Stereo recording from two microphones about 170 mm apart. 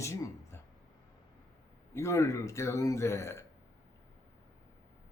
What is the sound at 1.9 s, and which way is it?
Speech, 15° left (ahead or behind).